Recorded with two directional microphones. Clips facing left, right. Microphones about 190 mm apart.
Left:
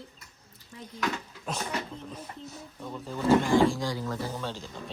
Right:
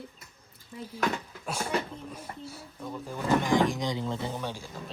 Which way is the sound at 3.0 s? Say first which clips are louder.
Left 3 dB; 15° right (ahead or behind).